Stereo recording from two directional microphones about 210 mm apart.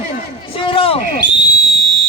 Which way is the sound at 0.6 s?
25° left (ahead or behind).